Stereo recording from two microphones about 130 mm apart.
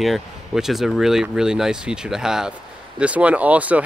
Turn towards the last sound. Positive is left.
turn(degrees=-10)  # may be behind; listen again after turning